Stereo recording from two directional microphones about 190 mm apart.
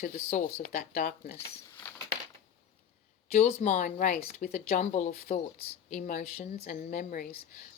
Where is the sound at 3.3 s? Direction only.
35° left (ahead or behind).